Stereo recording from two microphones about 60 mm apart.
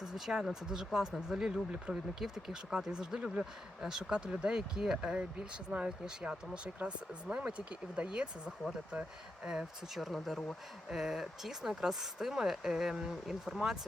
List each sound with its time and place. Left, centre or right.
0.0 s speech: centre